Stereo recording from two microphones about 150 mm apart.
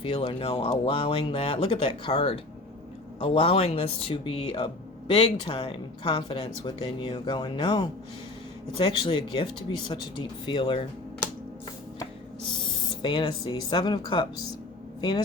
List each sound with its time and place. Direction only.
0.0 s speech: 35° left (ahead or behind)
12.5 s speech: 30° left (ahead or behind)